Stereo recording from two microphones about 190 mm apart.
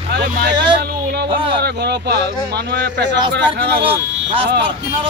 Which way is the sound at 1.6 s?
60° right (ahead or behind).